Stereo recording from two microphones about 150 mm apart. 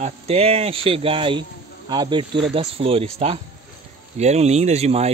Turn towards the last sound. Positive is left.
turn(degrees=-45)  # may be behind; listen again after turning